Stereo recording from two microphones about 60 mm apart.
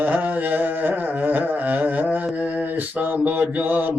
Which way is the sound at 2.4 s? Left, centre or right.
Right.